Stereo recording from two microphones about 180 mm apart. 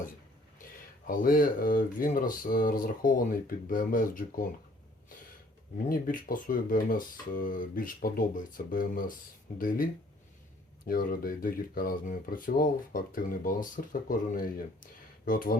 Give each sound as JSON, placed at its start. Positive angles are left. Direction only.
{"t": 0.6, "sound": "speech", "side_deg": 50}
{"t": 5.7, "sound": "speech", "side_deg": 50}